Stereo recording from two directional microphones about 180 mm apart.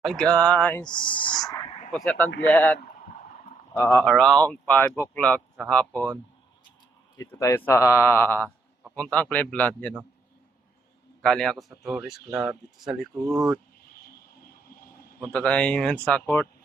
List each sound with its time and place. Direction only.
0.0 s speech: 5° left (ahead or behind)
0.9 s speech: 25° left (ahead or behind)
2.0 s speech: 10° left (ahead or behind)
3.8 s speech: 10° left (ahead or behind)
7.2 s speech: 15° left (ahead or behind)
11.2 s speech: 5° left (ahead or behind)
15.3 s speech: 5° left (ahead or behind)